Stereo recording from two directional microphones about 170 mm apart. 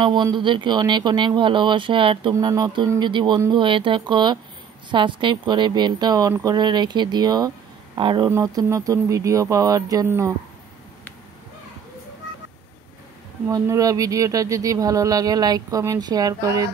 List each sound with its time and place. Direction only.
0.0 s speech: 25° right (ahead or behind)
8.3 s speech: 15° right (ahead or behind)
13.5 s speech: 20° right (ahead or behind)